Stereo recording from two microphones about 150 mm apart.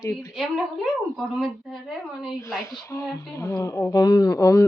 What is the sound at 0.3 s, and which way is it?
A woman's voice, centre (ahead or behind).